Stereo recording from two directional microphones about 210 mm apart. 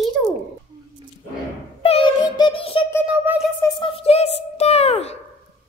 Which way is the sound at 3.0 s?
10° right (ahead or behind).